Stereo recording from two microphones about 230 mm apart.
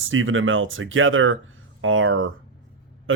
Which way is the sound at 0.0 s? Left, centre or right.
Right.